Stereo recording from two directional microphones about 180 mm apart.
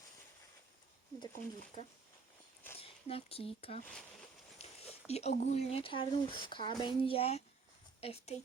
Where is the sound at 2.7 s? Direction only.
30° left (ahead or behind).